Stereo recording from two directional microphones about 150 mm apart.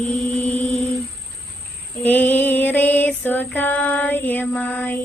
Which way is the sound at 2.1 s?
10° left (ahead or behind).